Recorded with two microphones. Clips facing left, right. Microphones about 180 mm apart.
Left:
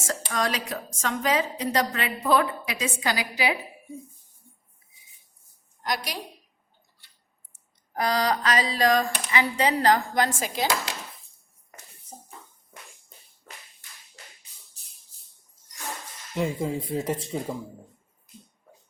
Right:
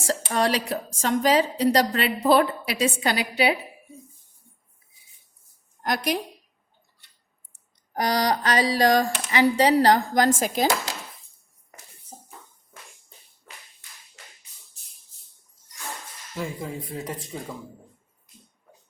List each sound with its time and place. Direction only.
0.0 s speech: 30° right (ahead or behind)
5.8 s a woman's voice: 50° right (ahead or behind)
7.9 s speech: 35° right (ahead or behind)
12.1 s a sound: 5° right (ahead or behind)
16.3 s speech: 25° left (ahead or behind)